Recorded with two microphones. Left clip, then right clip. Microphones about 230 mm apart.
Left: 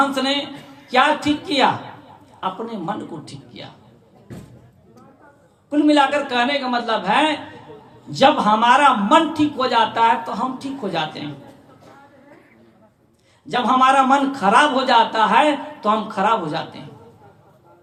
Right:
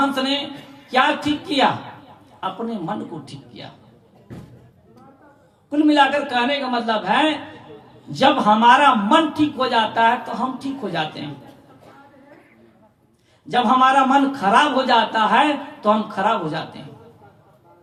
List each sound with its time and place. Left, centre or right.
0.1 s a sound: left
0.9 s a man's voice: left
5.7 s a man's voice: left
13.5 s a man's voice: left